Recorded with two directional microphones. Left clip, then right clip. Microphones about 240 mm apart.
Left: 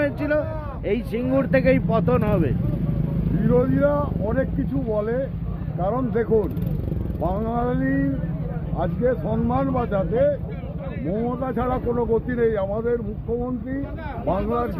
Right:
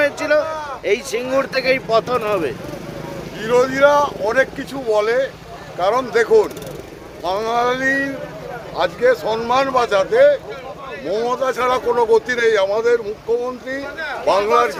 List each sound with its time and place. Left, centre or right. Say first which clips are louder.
0.0 s speech: right 6 dB; centre
3.4 s speech: right 7 dB; right
14.3 s speech: right 9 dB; right